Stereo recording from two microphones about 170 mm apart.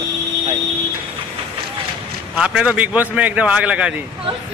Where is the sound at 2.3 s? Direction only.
5° right (ahead or behind).